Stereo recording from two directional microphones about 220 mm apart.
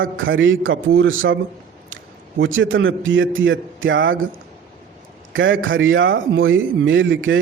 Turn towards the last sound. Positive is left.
turn(degrees=-60)  # may be behind; listen again after turning